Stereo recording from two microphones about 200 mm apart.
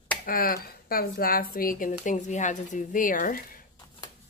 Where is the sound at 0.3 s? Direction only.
45° left (ahead or behind).